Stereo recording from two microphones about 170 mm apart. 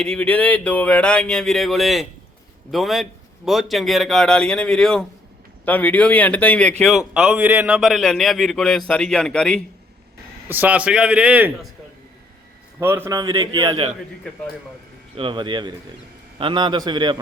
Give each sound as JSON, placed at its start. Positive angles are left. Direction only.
{"t": 0.0, "sound": "a man's voice", "side_deg": 5}
{"t": 10.5, "sound": "a man's voice", "side_deg": -10}
{"t": 12.8, "sound": "a man's voice", "side_deg": -15}
{"t": 14.3, "sound": "a man's voice", "side_deg": 10}
{"t": 15.1, "sound": "a man's voice", "side_deg": -30}